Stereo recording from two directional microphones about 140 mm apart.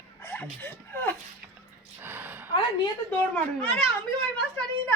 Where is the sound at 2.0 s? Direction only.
15° right (ahead or behind).